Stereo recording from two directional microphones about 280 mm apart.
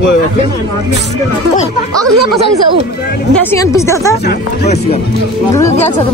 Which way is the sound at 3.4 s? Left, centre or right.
Centre.